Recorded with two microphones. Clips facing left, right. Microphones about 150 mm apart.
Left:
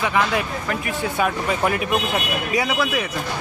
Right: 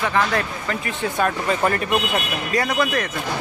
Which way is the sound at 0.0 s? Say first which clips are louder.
Even; 10° left (ahead or behind).